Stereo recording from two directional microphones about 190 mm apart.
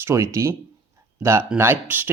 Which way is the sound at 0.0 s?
15° right (ahead or behind).